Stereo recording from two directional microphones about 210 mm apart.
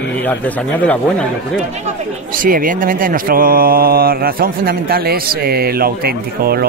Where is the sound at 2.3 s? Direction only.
40° right (ahead or behind).